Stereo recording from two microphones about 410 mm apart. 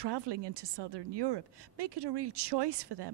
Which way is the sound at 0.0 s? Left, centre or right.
Right.